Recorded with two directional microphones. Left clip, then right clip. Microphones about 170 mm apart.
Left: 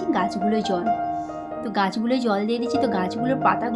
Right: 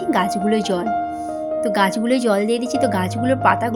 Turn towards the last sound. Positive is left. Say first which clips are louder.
# right 4 dB
turn(degrees=-20)  # may be behind; listen again after turning